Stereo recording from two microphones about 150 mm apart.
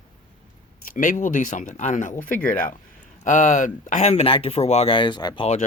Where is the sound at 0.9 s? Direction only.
60° left (ahead or behind); by 5.4 s 30° left (ahead or behind).